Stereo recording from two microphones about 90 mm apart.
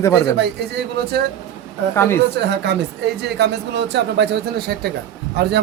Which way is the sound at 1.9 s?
25° left (ahead or behind).